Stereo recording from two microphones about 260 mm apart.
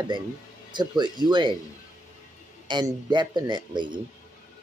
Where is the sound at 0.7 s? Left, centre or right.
Centre.